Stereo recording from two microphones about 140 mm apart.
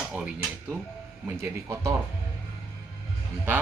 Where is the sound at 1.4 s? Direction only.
20° right (ahead or behind).